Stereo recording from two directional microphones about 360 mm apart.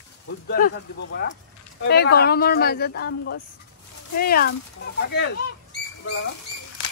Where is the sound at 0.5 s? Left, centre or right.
Left.